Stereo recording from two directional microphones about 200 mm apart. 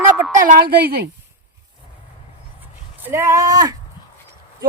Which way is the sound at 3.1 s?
15° right (ahead or behind).